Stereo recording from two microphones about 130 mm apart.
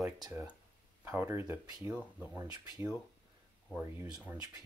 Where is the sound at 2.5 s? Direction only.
30° right (ahead or behind).